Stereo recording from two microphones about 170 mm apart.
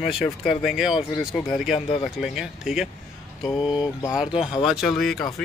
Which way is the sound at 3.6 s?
25° left (ahead or behind).